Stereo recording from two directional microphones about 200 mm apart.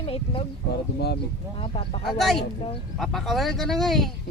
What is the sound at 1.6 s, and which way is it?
Speech, 30° left (ahead or behind).